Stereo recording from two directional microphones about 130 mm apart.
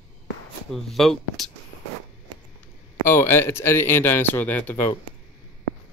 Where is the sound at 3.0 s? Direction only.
20° left (ahead or behind).